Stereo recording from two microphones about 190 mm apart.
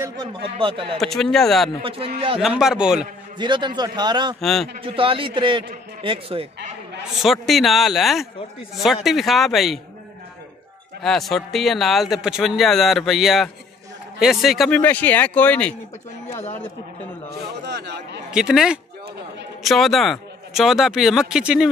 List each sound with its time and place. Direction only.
0.0 s speech: 25° right (ahead or behind)
0.9 s speech: centre (ahead or behind)
1.8 s speech: 30° right (ahead or behind)
2.4 s speech: 5° right (ahead or behind)
3.3 s speech: 25° right (ahead or behind)
4.4 s speech: centre (ahead or behind)
4.8 s speech: 30° right (ahead or behind)
7.2 s speech: centre (ahead or behind)
11.0 s speech: centre (ahead or behind)
17.6 s chatter: 60° right (ahead or behind)
18.3 s speech: 5° right (ahead or behind)